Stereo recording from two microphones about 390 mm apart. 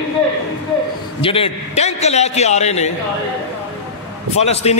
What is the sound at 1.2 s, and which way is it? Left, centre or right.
A man's voice, centre.